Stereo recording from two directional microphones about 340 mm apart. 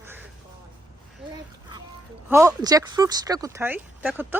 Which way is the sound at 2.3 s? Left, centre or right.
Centre.